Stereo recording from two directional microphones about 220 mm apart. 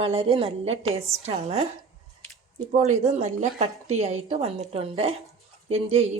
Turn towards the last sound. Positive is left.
turn(degrees=-30)  # may be behind; listen again after turning